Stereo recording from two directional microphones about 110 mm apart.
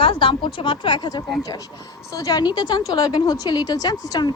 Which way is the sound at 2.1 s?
35° left (ahead or behind).